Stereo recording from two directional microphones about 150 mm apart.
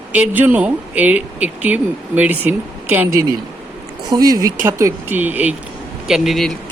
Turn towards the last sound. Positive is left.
turn(degrees=0)  # may be behind; listen again after turning